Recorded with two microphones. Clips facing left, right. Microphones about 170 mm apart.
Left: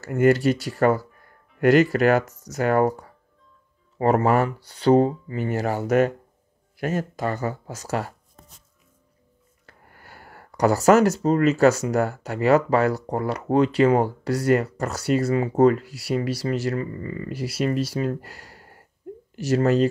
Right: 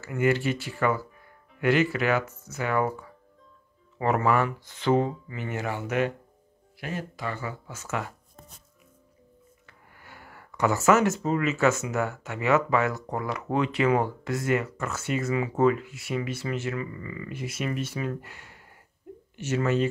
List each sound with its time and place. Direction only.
0.0 s speech: 40° left (ahead or behind)
9.7 s speech: 40° left (ahead or behind)